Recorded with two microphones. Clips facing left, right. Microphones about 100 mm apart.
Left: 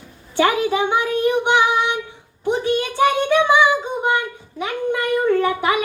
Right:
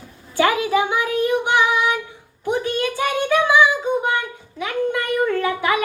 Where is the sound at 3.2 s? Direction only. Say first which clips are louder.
Right 3 dB; 25° left (ahead or behind).